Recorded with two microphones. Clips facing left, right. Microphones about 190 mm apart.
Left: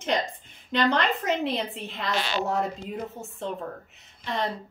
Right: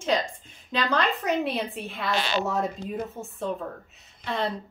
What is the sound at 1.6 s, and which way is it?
Speech, 20° left (ahead or behind).